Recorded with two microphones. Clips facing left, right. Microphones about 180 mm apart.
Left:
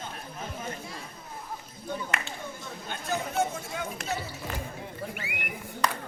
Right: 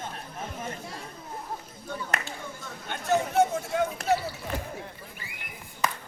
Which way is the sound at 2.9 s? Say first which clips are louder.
Right 6 dB; 65° right (ahead or behind).